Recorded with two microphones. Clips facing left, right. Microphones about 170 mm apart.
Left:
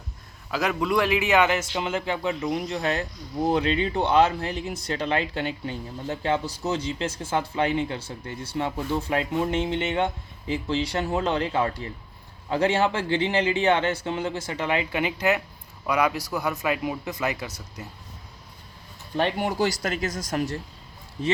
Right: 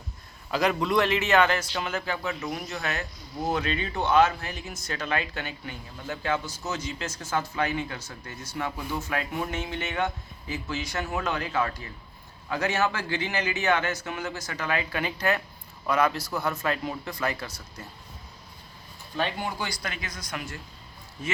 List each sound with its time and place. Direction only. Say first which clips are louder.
0.5 s a man's voice: even; 5° left (ahead or behind)
19.5 s speech: left 8 dB; 40° left (ahead or behind)